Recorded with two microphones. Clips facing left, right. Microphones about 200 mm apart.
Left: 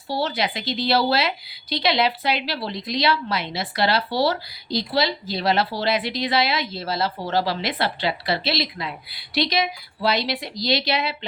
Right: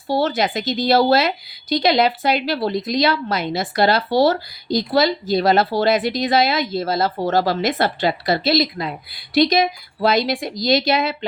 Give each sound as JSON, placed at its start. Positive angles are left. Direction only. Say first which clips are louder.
{"t": 0.1, "sound": "a woman's voice", "louder": "right 6 dB", "side_deg": -50}